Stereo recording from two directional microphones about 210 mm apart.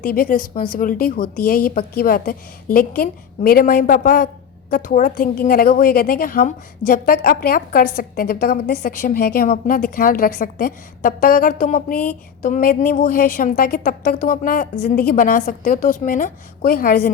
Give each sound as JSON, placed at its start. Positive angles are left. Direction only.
{"t": 0.0, "sound": "a woman's voice", "side_deg": 45}